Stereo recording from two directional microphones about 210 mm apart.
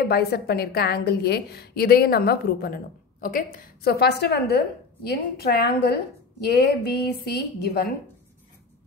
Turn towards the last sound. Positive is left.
turn(degrees=45)  # may be behind; listen again after turning